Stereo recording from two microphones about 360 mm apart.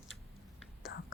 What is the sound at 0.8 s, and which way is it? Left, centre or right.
Whispering, left.